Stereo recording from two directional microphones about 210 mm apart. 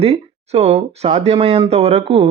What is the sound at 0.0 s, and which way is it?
Speech, 30° right (ahead or behind).